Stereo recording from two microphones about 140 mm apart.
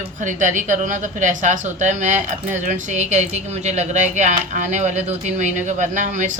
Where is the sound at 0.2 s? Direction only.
65° right (ahead or behind).